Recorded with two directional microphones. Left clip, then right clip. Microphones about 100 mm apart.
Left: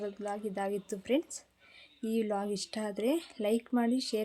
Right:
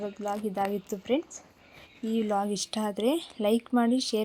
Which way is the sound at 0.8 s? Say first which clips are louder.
Right 3 dB; 20° right (ahead or behind).